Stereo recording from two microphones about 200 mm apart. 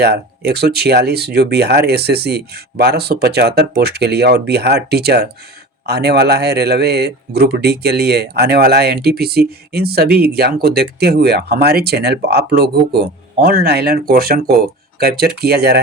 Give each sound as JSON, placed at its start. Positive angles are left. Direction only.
{"t": 0.0, "sound": "a man's voice", "side_deg": -55}